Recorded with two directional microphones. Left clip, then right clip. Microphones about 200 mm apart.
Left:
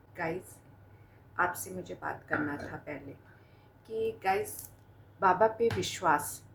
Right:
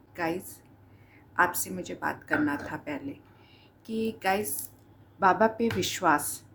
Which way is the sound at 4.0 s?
50° right (ahead or behind).